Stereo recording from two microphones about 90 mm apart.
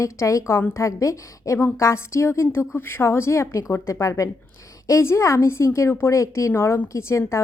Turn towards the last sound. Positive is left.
turn(degrees=35)  # may be behind; listen again after turning